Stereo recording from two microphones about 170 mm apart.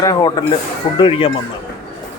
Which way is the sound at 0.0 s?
25° left (ahead or behind).